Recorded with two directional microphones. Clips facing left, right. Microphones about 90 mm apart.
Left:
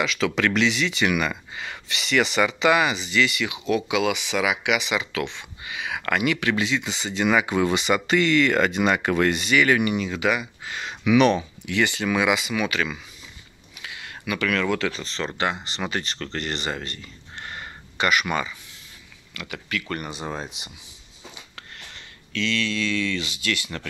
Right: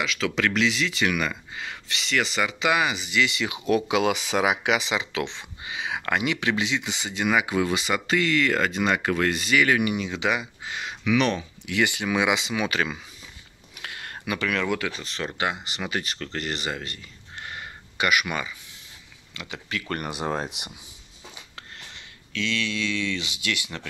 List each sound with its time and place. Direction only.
0.0 s speech: centre (ahead or behind)
3.3 s speech: 25° right (ahead or behind)
3.5 s speech: 40° right (ahead or behind); by 10.8 s 20° right (ahead or behind)
11.1 s speech: 10° left (ahead or behind)
11.6 s speech: 10° right (ahead or behind); by 12.9 s 30° right (ahead or behind)
13.7 s a sound: 50° right (ahead or behind)
14.2 s speech: 30° right (ahead or behind)
14.5 s speech: 15° right (ahead or behind)
19.3 s speech: 25° right (ahead or behind)
20.1 s speech: 60° right (ahead or behind)
22.3 s speech: 10° right (ahead or behind)